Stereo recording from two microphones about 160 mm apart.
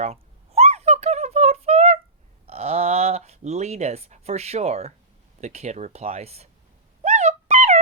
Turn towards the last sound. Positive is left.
turn(degrees=-45)  # may be behind; listen again after turning